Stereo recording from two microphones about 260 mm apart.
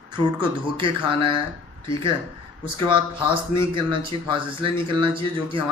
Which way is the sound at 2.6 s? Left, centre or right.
Centre.